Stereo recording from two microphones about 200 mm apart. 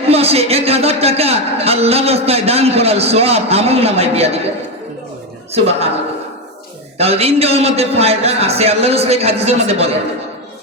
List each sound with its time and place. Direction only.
0.1 s a man's voice: 30° right (ahead or behind)
5.5 s a man's voice: 30° right (ahead or behind)
7.0 s a man's voice: 30° right (ahead or behind)